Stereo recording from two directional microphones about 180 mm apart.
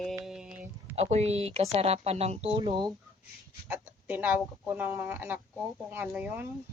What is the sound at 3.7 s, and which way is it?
Speech, 10° right (ahead or behind).